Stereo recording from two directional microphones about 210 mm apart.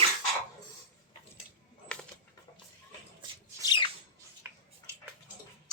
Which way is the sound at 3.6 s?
20° left (ahead or behind).